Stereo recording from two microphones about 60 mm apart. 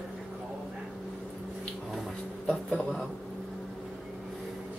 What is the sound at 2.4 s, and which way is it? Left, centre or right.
Speech, centre.